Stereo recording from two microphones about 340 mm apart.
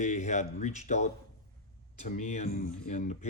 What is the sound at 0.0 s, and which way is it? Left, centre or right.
Speech, left.